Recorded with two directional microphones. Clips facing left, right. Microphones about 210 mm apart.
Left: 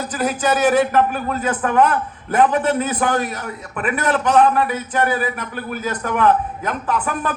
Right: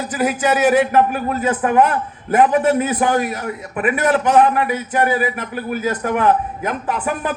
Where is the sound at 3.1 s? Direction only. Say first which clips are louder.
Right 3 dB; 10° right (ahead or behind).